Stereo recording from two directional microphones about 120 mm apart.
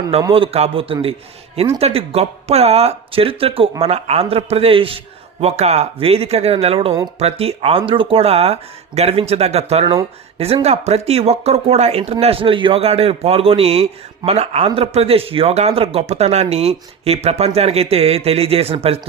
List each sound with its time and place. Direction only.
0.3 s speech: 50° right (ahead or behind)
5.4 s speech: 65° right (ahead or behind)
12.2 s speech: 50° right (ahead or behind)